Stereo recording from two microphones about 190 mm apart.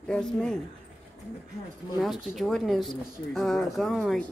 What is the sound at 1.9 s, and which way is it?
Speech, centre (ahead or behind).